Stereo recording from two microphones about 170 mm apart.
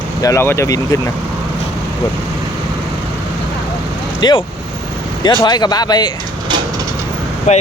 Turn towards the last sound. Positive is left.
turn(degrees=45)  # may be behind; listen again after turning